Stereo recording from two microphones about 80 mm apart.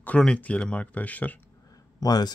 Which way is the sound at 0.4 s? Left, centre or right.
Centre.